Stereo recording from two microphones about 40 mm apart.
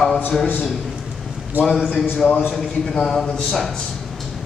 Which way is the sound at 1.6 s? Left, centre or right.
Centre.